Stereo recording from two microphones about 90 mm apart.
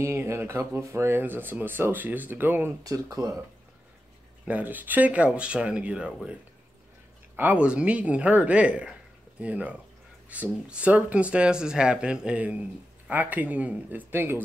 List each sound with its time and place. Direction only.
0.0 s speech: 30° right (ahead or behind)
2.8 s speech: 40° right (ahead or behind)
4.5 s speech: 20° right (ahead or behind)
7.3 s speech: 15° right (ahead or behind)